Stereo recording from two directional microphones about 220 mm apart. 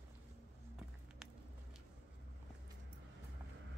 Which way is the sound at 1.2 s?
Centre (ahead or behind).